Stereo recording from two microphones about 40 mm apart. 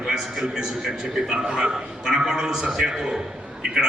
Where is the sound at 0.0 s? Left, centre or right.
Centre.